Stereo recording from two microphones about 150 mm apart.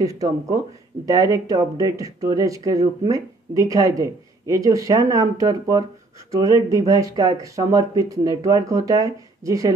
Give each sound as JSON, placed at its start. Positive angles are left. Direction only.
{"t": 0.0, "sound": "speech", "side_deg": -20}